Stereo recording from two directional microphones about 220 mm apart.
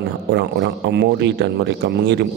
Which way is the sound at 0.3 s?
50° right (ahead or behind).